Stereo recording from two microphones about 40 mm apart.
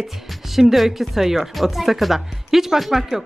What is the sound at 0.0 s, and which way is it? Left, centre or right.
Speech, centre.